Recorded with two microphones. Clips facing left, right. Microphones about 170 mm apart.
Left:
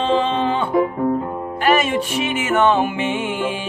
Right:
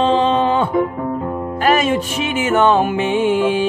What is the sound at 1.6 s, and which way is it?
Music, 40° right (ahead or behind).